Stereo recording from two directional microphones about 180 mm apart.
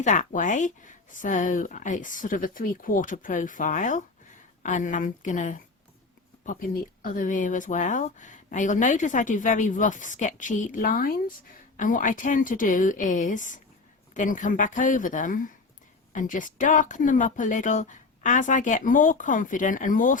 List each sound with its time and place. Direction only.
0.0 s speech: 45° left (ahead or behind)